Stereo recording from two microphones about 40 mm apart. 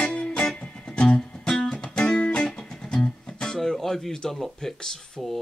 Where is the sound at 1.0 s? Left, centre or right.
Left.